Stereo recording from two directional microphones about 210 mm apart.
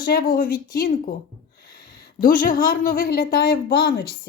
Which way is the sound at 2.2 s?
40° left (ahead or behind).